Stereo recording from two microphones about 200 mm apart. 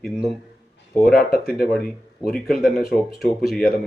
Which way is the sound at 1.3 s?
50° left (ahead or behind).